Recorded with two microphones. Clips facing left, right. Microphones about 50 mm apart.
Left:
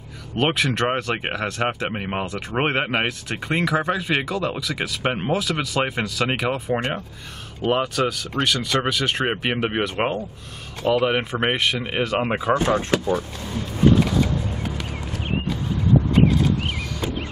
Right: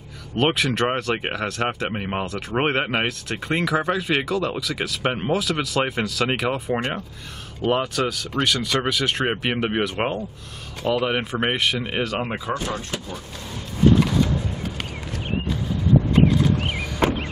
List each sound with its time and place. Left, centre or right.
0.4 s speech: centre
12.2 s speech: centre
12.5 s speech: left
12.9 s speech: left
17.0 s vehicle: right